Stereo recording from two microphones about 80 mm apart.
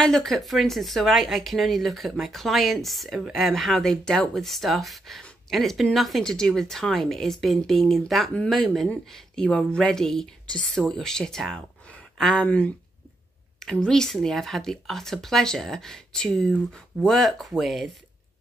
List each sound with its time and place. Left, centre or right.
0.0 s speech: centre
12.4 s speech: centre
13.6 s speech: centre